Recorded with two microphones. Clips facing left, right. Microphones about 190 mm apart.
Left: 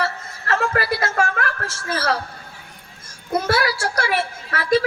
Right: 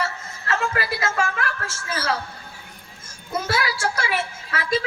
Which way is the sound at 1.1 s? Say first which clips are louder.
Left 3 dB; 50° left (ahead or behind).